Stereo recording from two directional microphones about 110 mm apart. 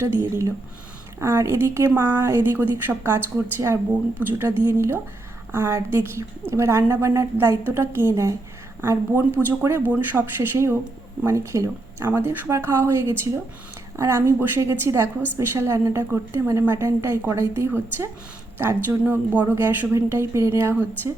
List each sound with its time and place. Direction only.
0.0 s a woman's voice: 25° right (ahead or behind)
4.2 s a woman's voice: 20° right (ahead or behind)